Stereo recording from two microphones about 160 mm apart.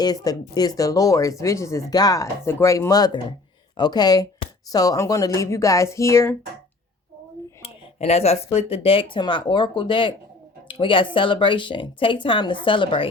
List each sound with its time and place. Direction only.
0.0 s speech: 25° left (ahead or behind)
7.6 s a sound: 40° left (ahead or behind)
8.5 s speech: 35° left (ahead or behind)